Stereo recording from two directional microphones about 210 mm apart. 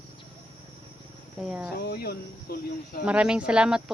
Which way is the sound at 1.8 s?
50° left (ahead or behind).